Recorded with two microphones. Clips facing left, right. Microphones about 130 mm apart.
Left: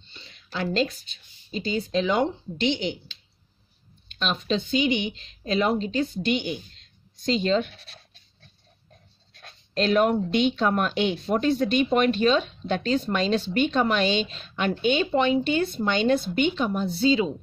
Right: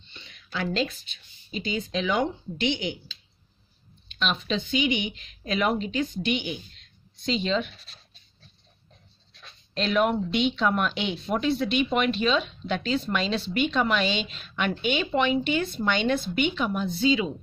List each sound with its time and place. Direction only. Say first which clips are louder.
0.2 s speech: left 1 dB; 35° left (ahead or behind)
4.2 s speech: left 2 dB; 40° left (ahead or behind); by 8.5 s 60° left (ahead or behind)
9.3 s speech: left 4 dB; 50° left (ahead or behind); by 17.3 s 35° left (ahead or behind)